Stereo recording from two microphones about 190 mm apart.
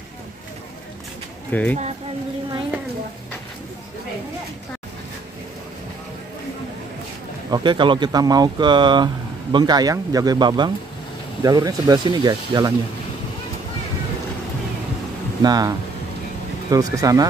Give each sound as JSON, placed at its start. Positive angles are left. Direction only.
{"t": 1.5, "sound": "speech", "side_deg": 10}
{"t": 7.5, "sound": "speech", "side_deg": -25}
{"t": 15.4, "sound": "speech", "side_deg": -20}
{"t": 16.7, "sound": "speech", "side_deg": -20}